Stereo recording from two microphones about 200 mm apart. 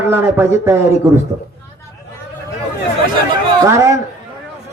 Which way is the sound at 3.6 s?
15° right (ahead or behind).